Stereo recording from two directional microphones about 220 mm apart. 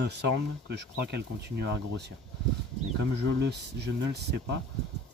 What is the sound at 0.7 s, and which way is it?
Speech, 50° right (ahead or behind).